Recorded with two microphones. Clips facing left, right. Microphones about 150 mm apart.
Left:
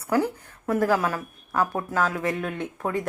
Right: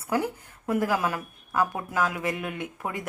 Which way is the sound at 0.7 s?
15° right (ahead or behind).